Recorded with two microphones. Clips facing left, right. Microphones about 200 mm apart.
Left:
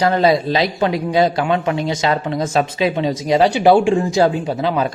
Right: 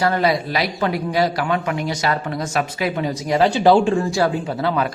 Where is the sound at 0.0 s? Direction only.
25° left (ahead or behind).